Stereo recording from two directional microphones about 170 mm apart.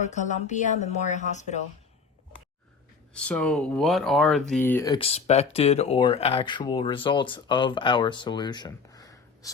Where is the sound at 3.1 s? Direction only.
5° left (ahead or behind).